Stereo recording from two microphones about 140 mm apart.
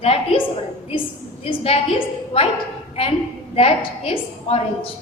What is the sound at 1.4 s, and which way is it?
A woman's voice, 45° left (ahead or behind).